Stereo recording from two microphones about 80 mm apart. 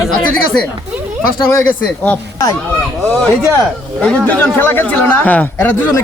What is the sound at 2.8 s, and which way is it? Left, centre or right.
Speech, centre.